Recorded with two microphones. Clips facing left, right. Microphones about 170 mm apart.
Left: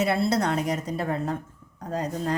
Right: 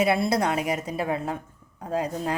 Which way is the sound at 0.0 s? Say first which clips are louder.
Right 1 dB; 10° right (ahead or behind).